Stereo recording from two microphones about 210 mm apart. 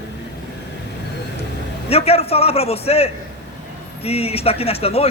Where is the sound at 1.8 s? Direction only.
30° left (ahead or behind).